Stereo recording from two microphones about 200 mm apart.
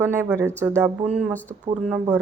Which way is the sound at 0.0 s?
10° right (ahead or behind).